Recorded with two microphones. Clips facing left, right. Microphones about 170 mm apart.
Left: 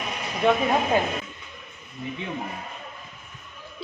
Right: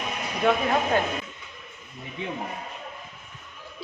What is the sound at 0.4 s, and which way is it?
Speech, centre (ahead or behind).